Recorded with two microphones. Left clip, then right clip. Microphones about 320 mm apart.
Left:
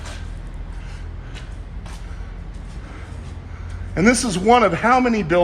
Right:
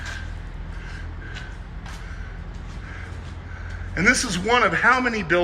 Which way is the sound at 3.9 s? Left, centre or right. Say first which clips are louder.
Left 2 dB; centre.